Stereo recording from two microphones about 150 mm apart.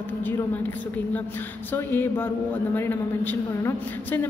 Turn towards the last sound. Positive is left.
turn(degrees=15)  # may be behind; listen again after turning